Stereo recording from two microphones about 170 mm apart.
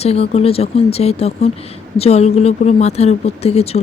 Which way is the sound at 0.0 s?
35° left (ahead or behind).